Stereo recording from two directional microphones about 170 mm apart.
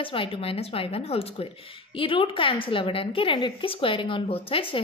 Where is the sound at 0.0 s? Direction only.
30° left (ahead or behind).